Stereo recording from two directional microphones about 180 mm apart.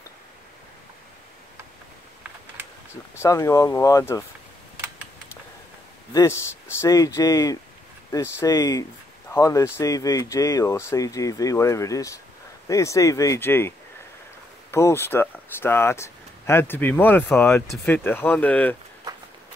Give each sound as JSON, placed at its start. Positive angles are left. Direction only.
{"t": 3.2, "sound": "speech", "side_deg": 15}
{"t": 6.8, "sound": "speech", "side_deg": 20}